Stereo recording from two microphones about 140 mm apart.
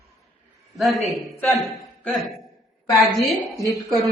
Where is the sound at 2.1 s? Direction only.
Centre (ahead or behind).